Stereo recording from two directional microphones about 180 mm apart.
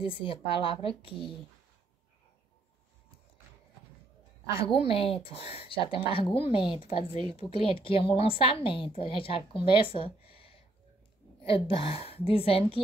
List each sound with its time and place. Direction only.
0.0 s speech: 30° left (ahead or behind)
4.6 s a woman's voice: 30° left (ahead or behind)